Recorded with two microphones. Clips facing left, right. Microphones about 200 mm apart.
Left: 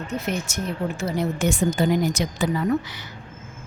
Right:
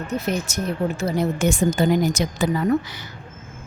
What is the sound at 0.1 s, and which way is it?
Speech, 35° right (ahead or behind).